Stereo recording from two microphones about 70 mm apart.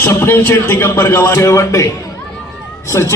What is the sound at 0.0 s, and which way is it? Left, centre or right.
A man's voice, left.